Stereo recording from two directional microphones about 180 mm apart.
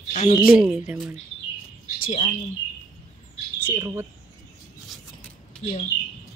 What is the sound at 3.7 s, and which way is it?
Speech, 15° right (ahead or behind).